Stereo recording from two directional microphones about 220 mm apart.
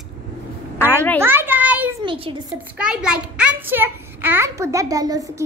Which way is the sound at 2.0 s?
25° right (ahead or behind).